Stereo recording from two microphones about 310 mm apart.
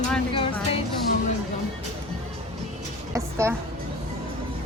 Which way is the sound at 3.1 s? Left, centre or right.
Centre.